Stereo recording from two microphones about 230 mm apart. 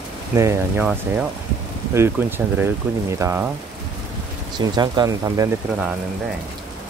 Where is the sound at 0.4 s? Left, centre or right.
Centre.